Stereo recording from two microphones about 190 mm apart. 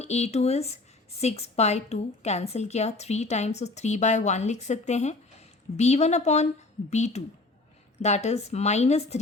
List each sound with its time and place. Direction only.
0.0 s a woman's voice: 35° left (ahead or behind)